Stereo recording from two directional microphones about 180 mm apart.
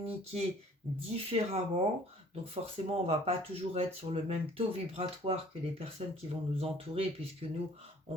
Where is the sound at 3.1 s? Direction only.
35° right (ahead or behind).